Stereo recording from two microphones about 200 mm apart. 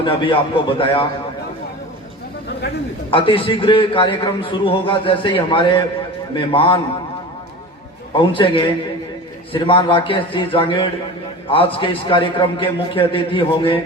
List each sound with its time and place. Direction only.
0.0 s a man's voice: 25° left (ahead or behind)
3.1 s a man's voice: 25° left (ahead or behind)
8.3 s a man's voice: 25° left (ahead or behind)